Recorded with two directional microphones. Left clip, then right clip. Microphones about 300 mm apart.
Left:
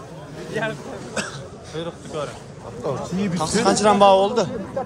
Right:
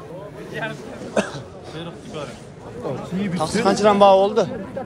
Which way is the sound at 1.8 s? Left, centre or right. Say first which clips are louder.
Left 5 dB; left.